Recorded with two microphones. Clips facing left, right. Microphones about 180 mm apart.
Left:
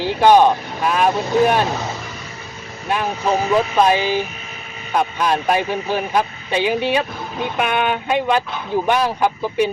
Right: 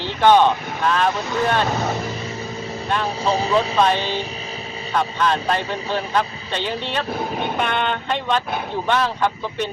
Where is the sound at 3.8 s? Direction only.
10° left (ahead or behind).